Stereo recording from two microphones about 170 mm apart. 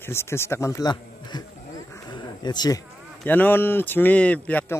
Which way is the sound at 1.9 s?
25° left (ahead or behind).